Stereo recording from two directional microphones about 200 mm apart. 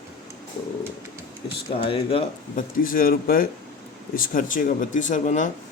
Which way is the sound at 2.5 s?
45° left (ahead or behind).